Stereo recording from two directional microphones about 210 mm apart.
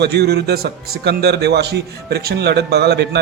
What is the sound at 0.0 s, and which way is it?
A man's voice, 50° right (ahead or behind).